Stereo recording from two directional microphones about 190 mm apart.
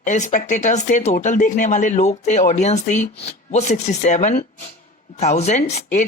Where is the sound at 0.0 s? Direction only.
40° left (ahead or behind).